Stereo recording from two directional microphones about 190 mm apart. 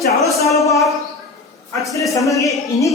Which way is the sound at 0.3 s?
15° left (ahead or behind).